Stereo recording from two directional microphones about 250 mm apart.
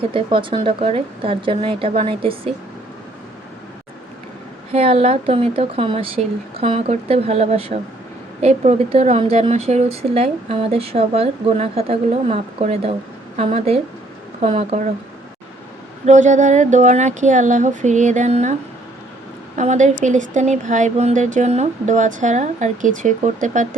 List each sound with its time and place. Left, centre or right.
0.0 s a woman's voice: right
4.7 s a woman's voice: right
16.0 s a woman's voice: right
19.5 s a woman's voice: right